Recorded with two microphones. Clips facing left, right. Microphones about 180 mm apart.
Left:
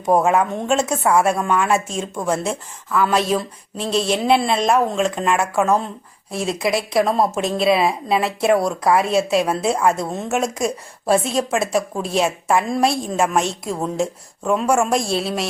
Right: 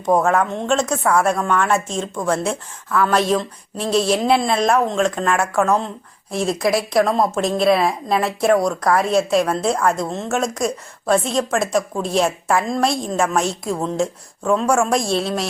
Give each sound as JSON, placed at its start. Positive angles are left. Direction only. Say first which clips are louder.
{"t": 0.0, "sound": "a woman's voice", "louder": "even", "side_deg": 10}